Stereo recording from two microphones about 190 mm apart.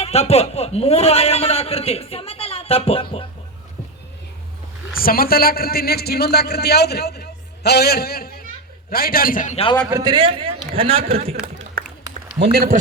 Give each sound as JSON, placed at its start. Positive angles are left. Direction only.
{"t": 0.0, "sound": "a man's voice", "side_deg": 30}
{"t": 4.9, "sound": "a man's voice", "side_deg": 50}
{"t": 9.9, "sound": "a man's voice", "side_deg": -20}
{"t": 12.4, "sound": "a man's voice", "side_deg": -50}